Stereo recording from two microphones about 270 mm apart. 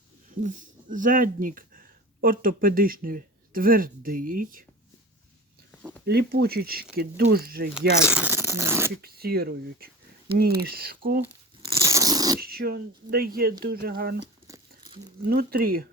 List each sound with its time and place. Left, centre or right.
0.3 s speech: right
5.7 s a sound: centre
6.1 s speech: right
8.1 s zipper: centre
9.0 s speech: right
11.8 s crunch: centre
12.4 s speech: right
15.3 s speech: right